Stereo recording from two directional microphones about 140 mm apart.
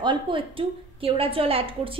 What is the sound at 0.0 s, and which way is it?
A woman's voice, 35° right (ahead or behind).